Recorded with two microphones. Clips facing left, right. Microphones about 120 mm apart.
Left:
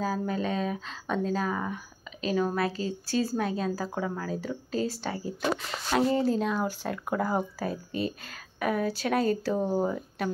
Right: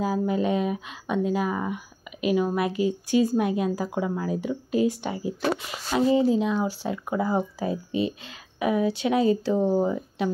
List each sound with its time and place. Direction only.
0.0 s a woman's voice: 15° right (ahead or behind)